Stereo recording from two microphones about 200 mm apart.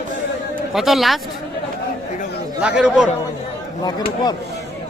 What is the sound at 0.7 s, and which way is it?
Speech, centre (ahead or behind).